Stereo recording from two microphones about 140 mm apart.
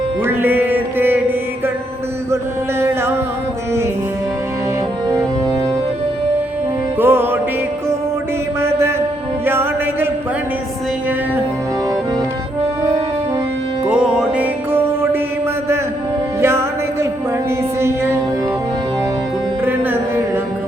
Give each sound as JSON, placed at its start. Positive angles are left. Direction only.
{"t": 0.3, "sound": "music", "side_deg": -15}
{"t": 2.3, "sound": "music", "side_deg": -20}
{"t": 7.0, "sound": "music", "side_deg": -15}
{"t": 8.6, "sound": "mantra", "side_deg": -20}
{"t": 9.5, "sound": "chant", "side_deg": -15}
{"t": 13.8, "sound": "music", "side_deg": -5}
{"t": 16.4, "sound": "music", "side_deg": -20}
{"t": 19.6, "sound": "music", "side_deg": -15}